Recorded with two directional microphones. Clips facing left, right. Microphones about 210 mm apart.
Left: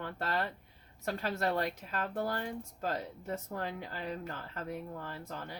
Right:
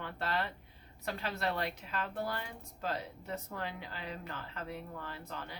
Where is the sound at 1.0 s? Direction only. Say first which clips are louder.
Left 3 dB; 45° left (ahead or behind).